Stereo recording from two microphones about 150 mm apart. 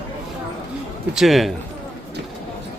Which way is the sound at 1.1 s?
Centre (ahead or behind).